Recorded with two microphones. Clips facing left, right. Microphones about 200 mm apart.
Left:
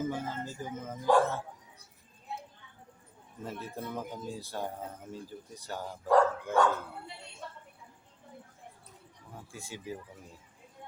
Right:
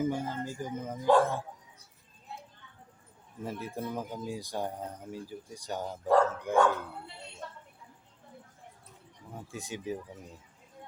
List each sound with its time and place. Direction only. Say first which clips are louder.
0.0 s speech: right 3 dB; 15° right (ahead or behind)
3.4 s speech: right 3 dB; 10° right (ahead or behind)
9.5 s speech: right 5 dB; 20° right (ahead or behind)